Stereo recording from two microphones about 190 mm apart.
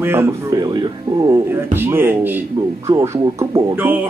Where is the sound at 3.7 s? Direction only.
10° right (ahead or behind).